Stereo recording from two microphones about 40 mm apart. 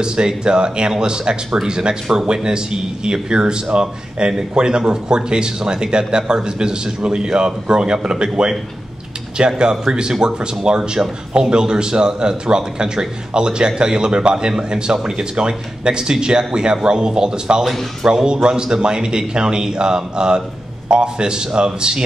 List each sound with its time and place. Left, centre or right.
0.0 s speech: centre
11.0 s a man's voice: right
11.3 s speech: right